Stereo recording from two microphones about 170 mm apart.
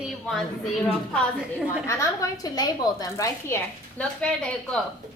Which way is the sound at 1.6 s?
15° left (ahead or behind).